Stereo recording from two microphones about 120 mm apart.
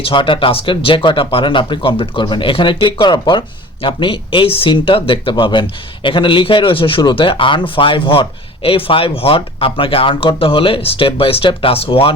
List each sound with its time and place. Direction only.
0.0 s speech: 45° left (ahead or behind)